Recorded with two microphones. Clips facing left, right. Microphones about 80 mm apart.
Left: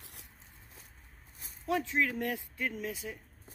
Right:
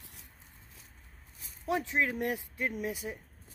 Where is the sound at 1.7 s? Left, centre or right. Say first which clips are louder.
Even; right.